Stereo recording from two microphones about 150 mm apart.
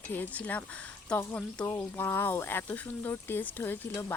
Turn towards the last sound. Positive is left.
turn(degrees=15)  # may be behind; listen again after turning